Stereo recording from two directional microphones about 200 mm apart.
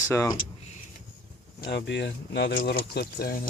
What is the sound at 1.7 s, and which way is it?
Speech, 60° left (ahead or behind).